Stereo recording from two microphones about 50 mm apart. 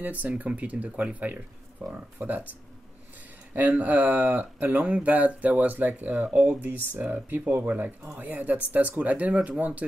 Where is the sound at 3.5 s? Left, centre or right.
Right.